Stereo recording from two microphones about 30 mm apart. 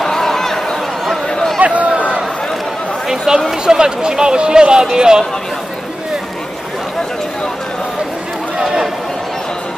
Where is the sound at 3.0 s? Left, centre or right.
Centre.